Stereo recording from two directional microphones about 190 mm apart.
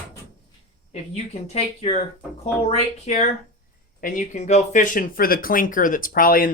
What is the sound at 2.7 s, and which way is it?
Speech, 35° left (ahead or behind).